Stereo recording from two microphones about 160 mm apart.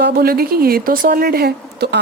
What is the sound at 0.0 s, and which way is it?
A woman's voice, 75° right (ahead or behind).